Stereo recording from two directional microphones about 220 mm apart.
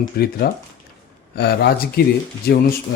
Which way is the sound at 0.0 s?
45° left (ahead or behind).